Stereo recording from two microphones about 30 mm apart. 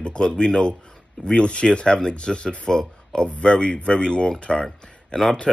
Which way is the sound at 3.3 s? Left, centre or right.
Left.